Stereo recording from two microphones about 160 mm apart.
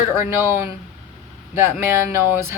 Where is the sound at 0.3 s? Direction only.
15° right (ahead or behind).